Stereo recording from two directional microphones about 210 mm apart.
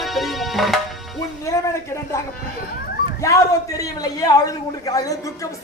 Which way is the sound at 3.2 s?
15° left (ahead or behind).